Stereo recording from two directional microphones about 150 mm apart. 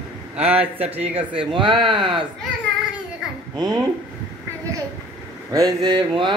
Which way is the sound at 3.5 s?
25° right (ahead or behind).